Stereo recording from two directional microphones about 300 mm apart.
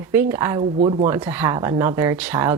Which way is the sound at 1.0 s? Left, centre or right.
Centre.